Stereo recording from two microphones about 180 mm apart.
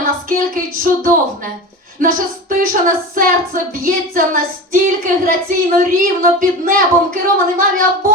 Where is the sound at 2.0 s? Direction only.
50° right (ahead or behind).